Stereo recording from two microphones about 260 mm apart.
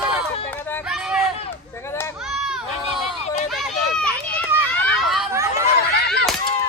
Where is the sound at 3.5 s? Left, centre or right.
Centre.